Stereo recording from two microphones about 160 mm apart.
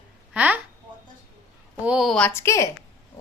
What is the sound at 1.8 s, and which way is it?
Speech, centre (ahead or behind).